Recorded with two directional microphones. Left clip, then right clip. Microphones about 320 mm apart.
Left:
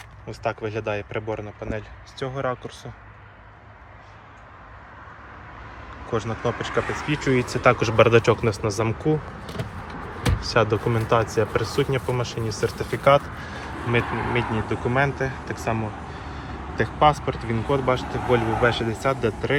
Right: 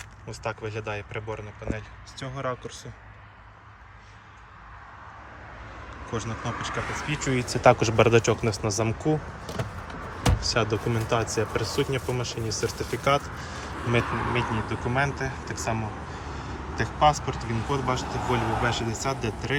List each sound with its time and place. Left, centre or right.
0.3 s speech: centre
6.1 s speech: centre
10.5 s speech: centre
16.7 s speech: centre